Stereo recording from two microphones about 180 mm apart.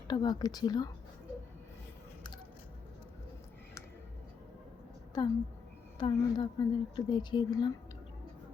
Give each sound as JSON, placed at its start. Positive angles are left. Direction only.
{"t": 0.1, "sound": "a woman's voice", "side_deg": 25}
{"t": 5.1, "sound": "a woman's voice", "side_deg": 20}